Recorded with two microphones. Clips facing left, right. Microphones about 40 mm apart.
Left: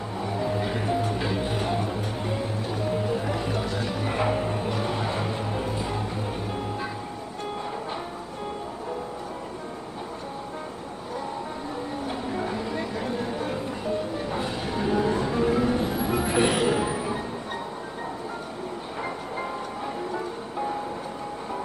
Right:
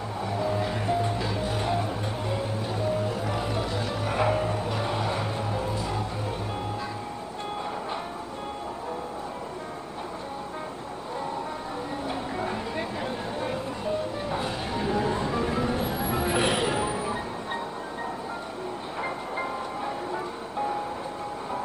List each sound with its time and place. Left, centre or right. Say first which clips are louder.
0.2 s music: even; centre
1.1 s music: left 2 dB; centre
1.6 s music: even; centre
2.9 s music: left 3 dB; centre
4.2 s music: right 1 dB; centre
4.7 s a sound: left 1 dB; centre
5.0 s music: left 1 dB; centre
12.4 s a sound: left 1 dB; centre
13.5 s music: left 1 dB; centre
19.0 s music: right 1 dB; centre